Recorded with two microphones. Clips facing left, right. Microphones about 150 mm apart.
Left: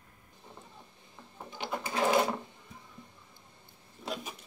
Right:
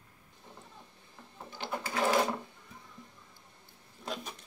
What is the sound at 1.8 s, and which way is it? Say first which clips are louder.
Sewing machine: left 1 dB; 20° left (ahead or behind).